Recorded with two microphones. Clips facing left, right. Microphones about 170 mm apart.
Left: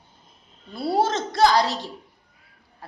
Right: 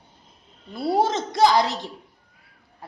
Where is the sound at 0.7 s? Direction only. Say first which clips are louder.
Right 1 dB; 20° right (ahead or behind).